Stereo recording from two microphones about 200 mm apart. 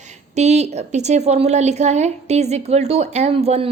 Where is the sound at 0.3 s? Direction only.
35° right (ahead or behind).